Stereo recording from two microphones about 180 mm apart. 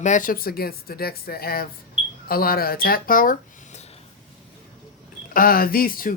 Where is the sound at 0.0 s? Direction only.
45° left (ahead or behind).